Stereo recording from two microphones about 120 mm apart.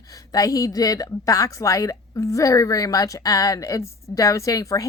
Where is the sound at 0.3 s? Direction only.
30° left (ahead or behind).